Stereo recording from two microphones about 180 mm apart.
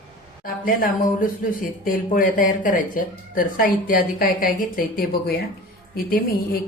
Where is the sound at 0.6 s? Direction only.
50° left (ahead or behind).